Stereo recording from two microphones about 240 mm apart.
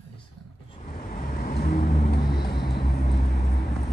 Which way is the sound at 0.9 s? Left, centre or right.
Left.